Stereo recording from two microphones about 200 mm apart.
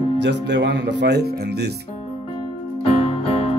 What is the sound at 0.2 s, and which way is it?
Speech, 60° right (ahead or behind).